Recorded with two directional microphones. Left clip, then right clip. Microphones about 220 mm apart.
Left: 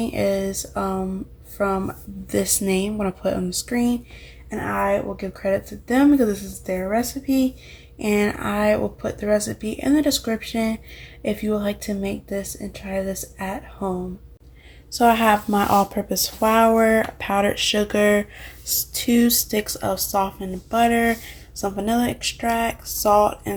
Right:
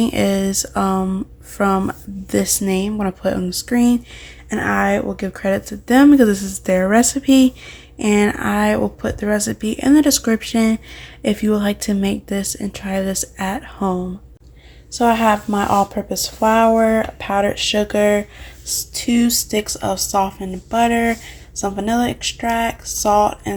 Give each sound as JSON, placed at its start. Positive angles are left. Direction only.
{"t": 0.0, "sound": "speech", "side_deg": -30}
{"t": 7.9, "sound": "speech", "side_deg": -25}
{"t": 14.9, "sound": "speech", "side_deg": 0}